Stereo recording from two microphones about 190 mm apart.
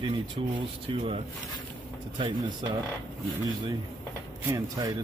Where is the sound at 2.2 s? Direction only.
25° right (ahead or behind).